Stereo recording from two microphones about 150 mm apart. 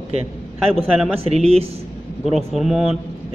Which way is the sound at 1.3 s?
40° right (ahead or behind).